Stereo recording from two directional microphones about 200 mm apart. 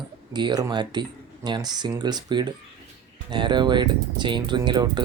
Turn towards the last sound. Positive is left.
turn(degrees=-20)  # may be behind; listen again after turning